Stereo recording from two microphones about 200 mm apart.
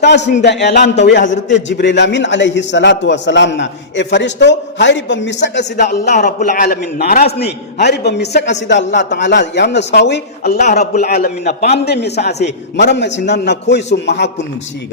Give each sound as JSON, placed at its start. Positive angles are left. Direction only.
{"t": 0.0, "sound": "a man's voice", "side_deg": 60}
{"t": 5.8, "sound": "a man's voice", "side_deg": 40}
{"t": 10.9, "sound": "a man's voice", "side_deg": 40}